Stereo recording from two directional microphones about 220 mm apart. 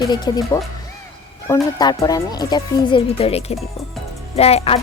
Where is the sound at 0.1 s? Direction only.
20° left (ahead or behind).